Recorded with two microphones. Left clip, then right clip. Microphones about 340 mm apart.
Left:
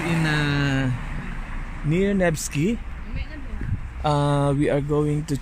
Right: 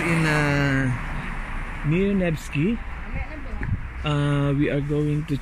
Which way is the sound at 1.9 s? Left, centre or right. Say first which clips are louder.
Left 2 dB; centre.